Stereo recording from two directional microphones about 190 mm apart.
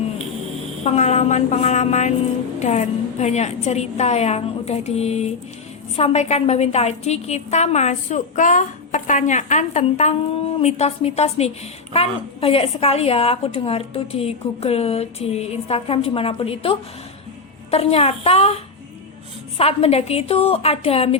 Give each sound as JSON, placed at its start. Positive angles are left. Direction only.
{"t": 0.9, "sound": "a woman's voice", "side_deg": 35}
{"t": 19.5, "sound": "a woman's voice", "side_deg": 30}